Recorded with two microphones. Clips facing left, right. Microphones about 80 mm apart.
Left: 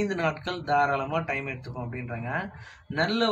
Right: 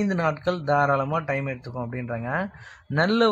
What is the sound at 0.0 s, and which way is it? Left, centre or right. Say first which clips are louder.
Speech: right 4 dB; centre.